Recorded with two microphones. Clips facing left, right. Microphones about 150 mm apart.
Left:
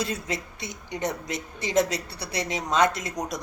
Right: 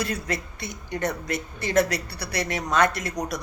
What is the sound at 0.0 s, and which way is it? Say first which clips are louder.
A man's voice: right 1 dB; 20° left (ahead or behind).